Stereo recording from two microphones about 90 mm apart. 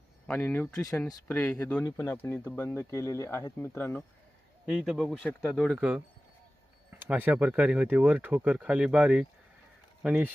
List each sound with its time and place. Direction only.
0.3 s speech: 15° left (ahead or behind)
0.9 s speech: 5° left (ahead or behind)
1.8 s speech: 30° left (ahead or behind)
4.6 s speech: 5° right (ahead or behind)
5.2 s speech: 10° left (ahead or behind)
5.7 s speech: 10° right (ahead or behind)
7.2 s speech: 15° right (ahead or behind)